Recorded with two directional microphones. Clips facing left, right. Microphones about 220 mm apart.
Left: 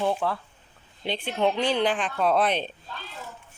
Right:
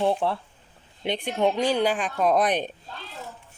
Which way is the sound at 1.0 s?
15° right (ahead or behind).